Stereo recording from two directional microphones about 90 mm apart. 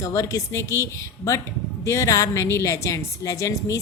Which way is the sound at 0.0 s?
40° left (ahead or behind).